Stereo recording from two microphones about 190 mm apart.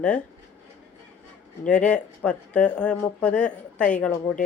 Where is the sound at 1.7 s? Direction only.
5° left (ahead or behind).